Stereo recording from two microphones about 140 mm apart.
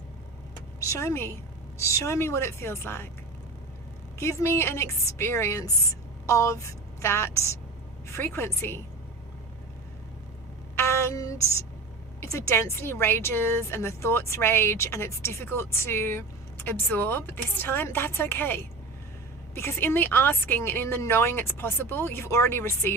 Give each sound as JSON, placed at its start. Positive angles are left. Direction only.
{"t": 0.8, "sound": "a woman's voice", "side_deg": 20}
{"t": 4.2, "sound": "a woman's voice", "side_deg": 20}
{"t": 10.8, "sound": "a sound", "side_deg": 20}
{"t": 12.2, "sound": "a woman's voice", "side_deg": 20}